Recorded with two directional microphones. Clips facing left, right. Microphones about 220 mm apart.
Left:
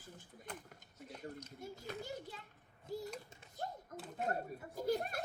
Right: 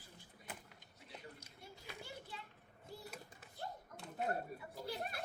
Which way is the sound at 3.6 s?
45° left (ahead or behind).